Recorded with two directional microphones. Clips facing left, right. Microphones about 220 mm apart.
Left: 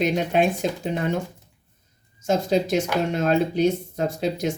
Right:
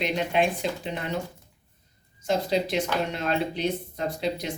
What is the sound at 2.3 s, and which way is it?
Speech, 45° left (ahead or behind).